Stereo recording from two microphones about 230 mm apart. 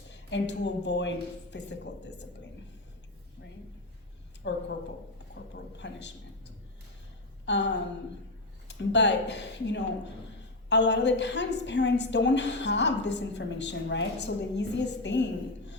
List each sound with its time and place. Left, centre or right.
0.1 s a woman's voice: left
4.4 s a woman's voice: left
7.4 s a sound: left
8.6 s a woman's voice: left